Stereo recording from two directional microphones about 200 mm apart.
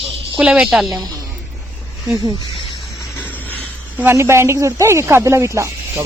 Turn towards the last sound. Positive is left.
turn(degrees=-15)  # may be behind; listen again after turning